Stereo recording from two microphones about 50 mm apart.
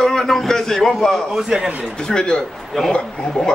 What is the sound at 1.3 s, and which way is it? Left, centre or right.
Speech, centre.